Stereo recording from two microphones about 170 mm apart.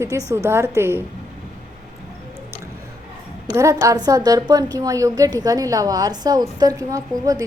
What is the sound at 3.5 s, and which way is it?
A woman's voice, 15° right (ahead or behind).